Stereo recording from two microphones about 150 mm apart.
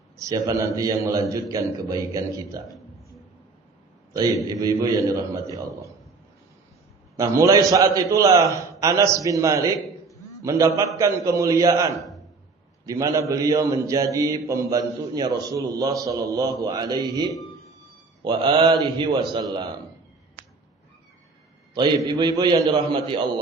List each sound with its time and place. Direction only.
0.2 s a man's voice: 25° right (ahead or behind)
4.4 s a man's voice: 25° right (ahead or behind)
7.2 s a man's voice: 20° right (ahead or behind)
21.8 s a man's voice: 30° right (ahead or behind)